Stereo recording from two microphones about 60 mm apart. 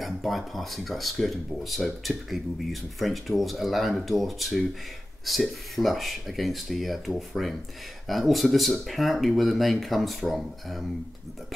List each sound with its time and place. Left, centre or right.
0.0 s speech: centre